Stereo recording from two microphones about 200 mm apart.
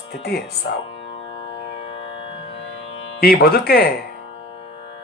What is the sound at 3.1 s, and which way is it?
Speech, 50° left (ahead or behind).